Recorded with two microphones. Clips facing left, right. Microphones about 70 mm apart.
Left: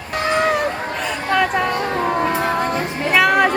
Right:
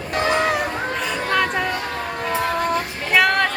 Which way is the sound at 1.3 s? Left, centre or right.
Centre.